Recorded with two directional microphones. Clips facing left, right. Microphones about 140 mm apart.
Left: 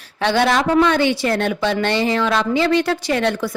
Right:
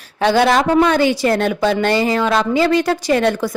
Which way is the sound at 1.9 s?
45° right (ahead or behind).